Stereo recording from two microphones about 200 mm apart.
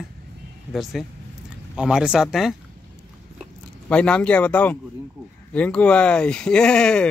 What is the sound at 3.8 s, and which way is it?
A man's voice, 5° left (ahead or behind).